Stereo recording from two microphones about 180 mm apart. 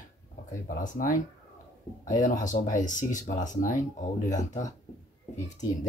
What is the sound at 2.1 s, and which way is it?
Speech, 45° left (ahead or behind).